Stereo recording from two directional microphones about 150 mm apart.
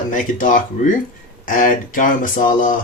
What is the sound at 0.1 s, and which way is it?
Speech, 60° left (ahead or behind).